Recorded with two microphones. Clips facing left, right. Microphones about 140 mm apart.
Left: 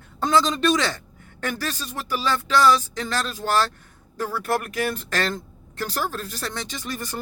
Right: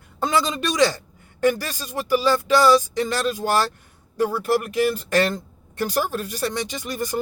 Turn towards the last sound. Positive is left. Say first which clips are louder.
# right 4 dB
turn(degrees=-20)  # may be behind; listen again after turning